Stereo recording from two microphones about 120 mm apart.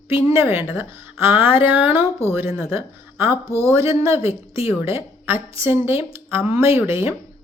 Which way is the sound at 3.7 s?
55° left (ahead or behind).